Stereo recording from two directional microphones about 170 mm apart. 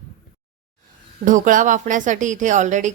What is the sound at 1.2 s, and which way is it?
Speech, 50° right (ahead or behind).